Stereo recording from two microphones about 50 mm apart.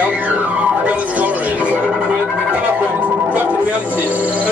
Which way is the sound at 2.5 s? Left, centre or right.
Right.